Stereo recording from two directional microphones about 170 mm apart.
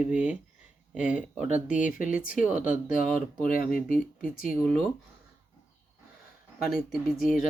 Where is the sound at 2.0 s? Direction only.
5° right (ahead or behind).